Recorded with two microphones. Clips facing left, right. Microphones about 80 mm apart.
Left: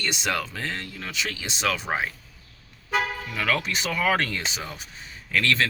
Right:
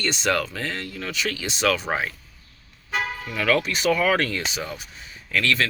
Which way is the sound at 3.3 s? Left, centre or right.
Left.